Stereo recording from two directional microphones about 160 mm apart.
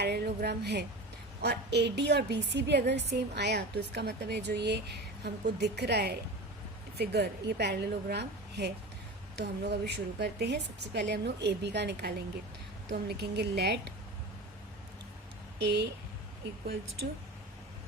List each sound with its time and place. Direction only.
0.0 s a woman's voice: 90° right
15.6 s a woman's voice: 90° right